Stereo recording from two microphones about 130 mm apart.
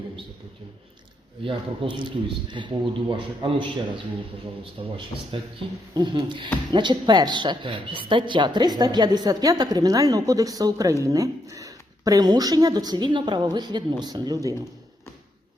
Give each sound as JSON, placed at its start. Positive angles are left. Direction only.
{"t": 1.5, "sound": "speech", "side_deg": -40}
{"t": 4.8, "sound": "speech", "side_deg": -40}